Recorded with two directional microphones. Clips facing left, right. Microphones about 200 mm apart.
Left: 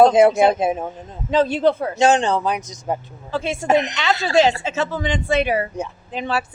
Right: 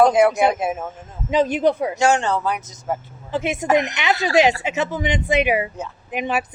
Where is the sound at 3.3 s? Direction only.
20° right (ahead or behind).